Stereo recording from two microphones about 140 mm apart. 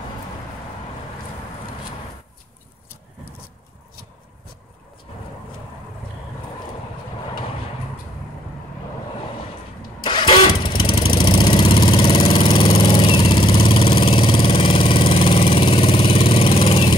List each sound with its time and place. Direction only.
5.1 s vehicle: 50° left (ahead or behind)
10.0 s engine starting: 35° left (ahead or behind)
10.9 s engine: 35° left (ahead or behind)